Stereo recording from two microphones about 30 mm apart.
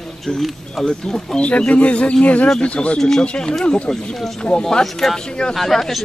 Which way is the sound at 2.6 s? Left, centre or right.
Left.